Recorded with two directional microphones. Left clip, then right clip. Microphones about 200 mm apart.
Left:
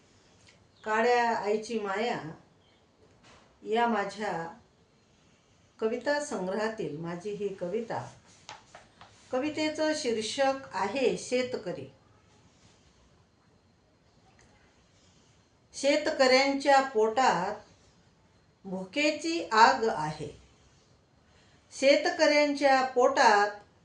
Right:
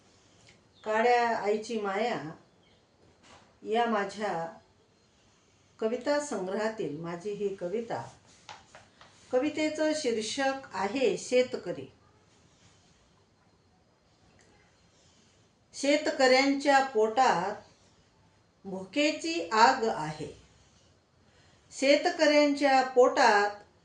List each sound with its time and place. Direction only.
0.9 s speech: 5° left (ahead or behind)
3.7 s speech: centre (ahead or behind)
5.8 s speech: 5° left (ahead or behind)
8.5 s a sound: 5° right (ahead or behind)
9.4 s speech: 5° left (ahead or behind)
15.7 s speech: 5° left (ahead or behind)
18.9 s speech: 10° left (ahead or behind)
21.7 s speech: 5° left (ahead or behind)